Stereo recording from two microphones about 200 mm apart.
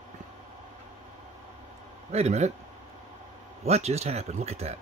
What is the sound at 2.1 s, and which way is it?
Speech, 35° right (ahead or behind).